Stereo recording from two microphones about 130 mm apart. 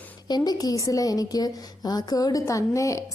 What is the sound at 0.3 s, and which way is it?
A woman's voice, 30° left (ahead or behind).